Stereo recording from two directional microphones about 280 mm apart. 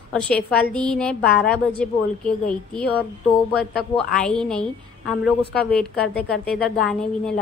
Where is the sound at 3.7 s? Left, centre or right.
Left.